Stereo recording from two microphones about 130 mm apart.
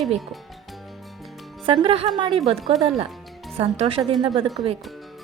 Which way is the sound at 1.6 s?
40° right (ahead or behind).